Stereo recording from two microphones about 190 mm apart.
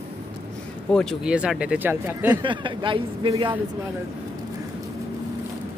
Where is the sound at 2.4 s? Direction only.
25° right (ahead or behind).